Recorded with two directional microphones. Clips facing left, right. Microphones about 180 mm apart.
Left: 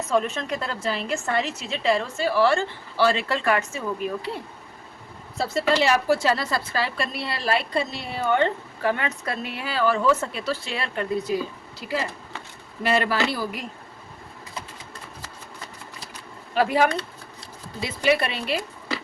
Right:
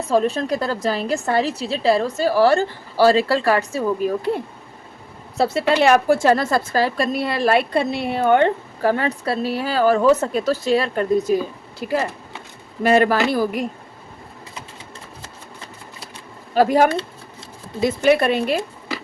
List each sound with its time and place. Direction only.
0.0 s a woman's voice: 35° right (ahead or behind)
5.4 s a woman's voice: 65° right (ahead or behind)
8.8 s a woman's voice: 40° right (ahead or behind)
16.6 s speech: 45° right (ahead or behind)